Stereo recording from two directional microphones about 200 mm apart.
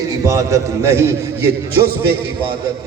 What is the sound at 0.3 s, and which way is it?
Speech, 15° right (ahead or behind).